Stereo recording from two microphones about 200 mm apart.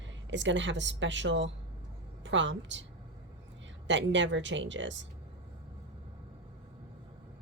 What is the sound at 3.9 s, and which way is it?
Speech, 65° right (ahead or behind).